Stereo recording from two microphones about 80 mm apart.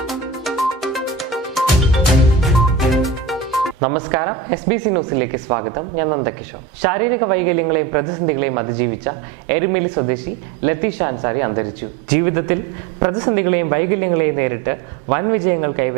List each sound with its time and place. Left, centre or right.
0.0 s music: centre
3.8 s speech: centre